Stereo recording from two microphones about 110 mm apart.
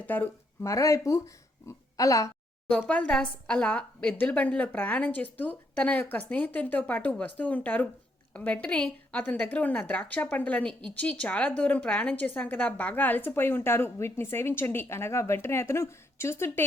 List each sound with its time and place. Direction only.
0.0 s speech: 15° left (ahead or behind)
0.6 s a woman's voice: 30° left (ahead or behind)
2.6 s a woman's voice: 10° left (ahead or behind)